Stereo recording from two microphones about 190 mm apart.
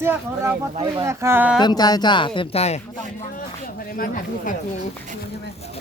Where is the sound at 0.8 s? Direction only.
25° right (ahead or behind).